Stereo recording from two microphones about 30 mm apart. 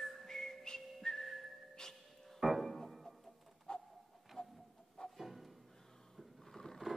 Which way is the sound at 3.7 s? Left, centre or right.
Left.